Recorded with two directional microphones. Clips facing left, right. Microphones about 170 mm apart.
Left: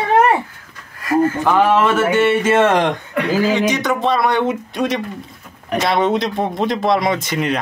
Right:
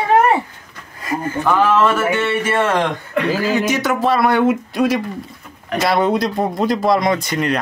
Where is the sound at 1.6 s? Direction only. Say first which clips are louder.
Left 1 dB; 15° left (ahead or behind).